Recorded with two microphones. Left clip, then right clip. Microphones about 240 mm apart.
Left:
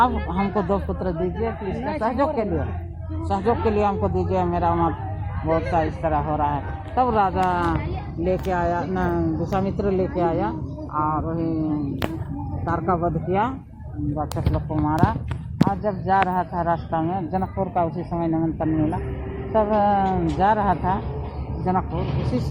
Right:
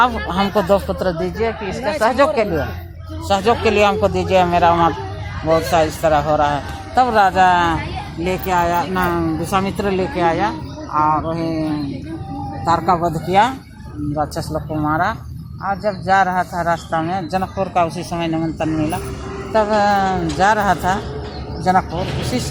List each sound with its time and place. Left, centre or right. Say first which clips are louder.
0.0 s speech: right 5 dB; right
12.6 s speech: right 7 dB; right
14.8 s speech: right 5 dB; right
19.5 s speech: right 4 dB; right